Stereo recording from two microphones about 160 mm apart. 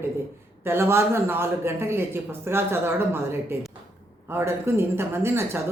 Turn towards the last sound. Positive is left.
turn(degrees=-15)  # may be behind; listen again after turning